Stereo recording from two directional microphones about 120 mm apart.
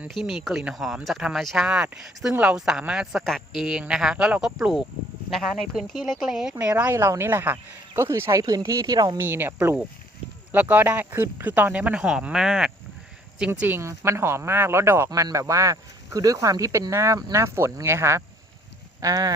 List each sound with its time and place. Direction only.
0.1 s a woman's voice: 5° right (ahead or behind); by 9.2 s 35° right (ahead or behind)
9.2 s speech: 20° right (ahead or behind)
13.5 s speech: 15° right (ahead or behind)